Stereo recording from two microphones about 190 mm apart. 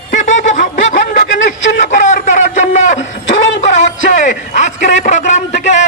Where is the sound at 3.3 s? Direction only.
75° left (ahead or behind).